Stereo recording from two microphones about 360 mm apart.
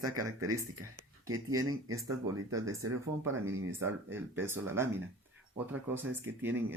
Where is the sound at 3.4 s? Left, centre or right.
Centre.